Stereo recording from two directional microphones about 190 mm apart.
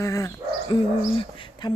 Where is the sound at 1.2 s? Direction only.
25° left (ahead or behind).